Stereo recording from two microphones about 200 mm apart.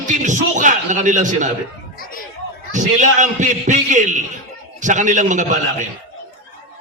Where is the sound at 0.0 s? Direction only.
40° right (ahead or behind).